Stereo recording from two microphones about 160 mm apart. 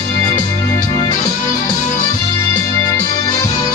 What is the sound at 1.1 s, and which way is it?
Music, 20° left (ahead or behind).